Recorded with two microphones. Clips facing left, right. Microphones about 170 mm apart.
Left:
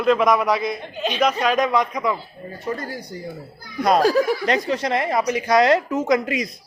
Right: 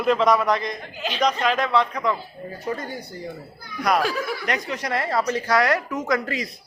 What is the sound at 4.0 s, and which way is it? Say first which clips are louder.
Speech: left 8 dB; 40° left (ahead or behind).